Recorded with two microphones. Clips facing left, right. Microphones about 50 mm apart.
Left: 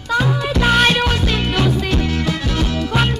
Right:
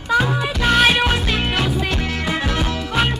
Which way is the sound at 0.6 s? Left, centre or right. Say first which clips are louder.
Left 1 dB; centre.